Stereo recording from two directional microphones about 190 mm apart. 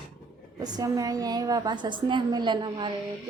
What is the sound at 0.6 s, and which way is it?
Speech, 20° right (ahead or behind).